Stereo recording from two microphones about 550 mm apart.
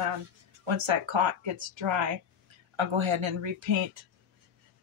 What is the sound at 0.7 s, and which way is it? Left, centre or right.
Speech, right.